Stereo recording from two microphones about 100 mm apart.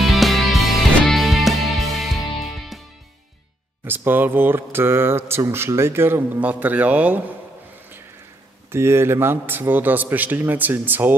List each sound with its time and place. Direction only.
0.0 s music: centre (ahead or behind)
3.8 s speech: 20° right (ahead or behind)
8.7 s speech: 25° right (ahead or behind)